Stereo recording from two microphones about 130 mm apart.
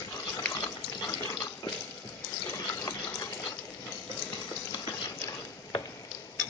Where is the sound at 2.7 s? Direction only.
30° left (ahead or behind).